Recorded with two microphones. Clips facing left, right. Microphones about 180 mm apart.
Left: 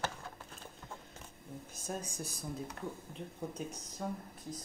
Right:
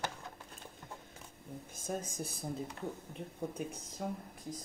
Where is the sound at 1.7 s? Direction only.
50° right (ahead or behind).